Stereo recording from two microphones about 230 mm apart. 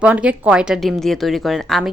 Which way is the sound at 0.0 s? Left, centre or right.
Centre.